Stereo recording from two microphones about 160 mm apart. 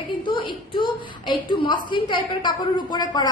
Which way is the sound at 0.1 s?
30° left (ahead or behind).